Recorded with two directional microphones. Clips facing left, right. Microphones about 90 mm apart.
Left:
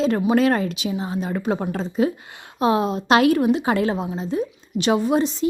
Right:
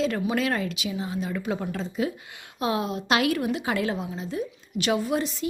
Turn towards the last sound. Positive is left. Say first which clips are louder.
# left 7 dB
turn(degrees=30)  # may be behind; listen again after turning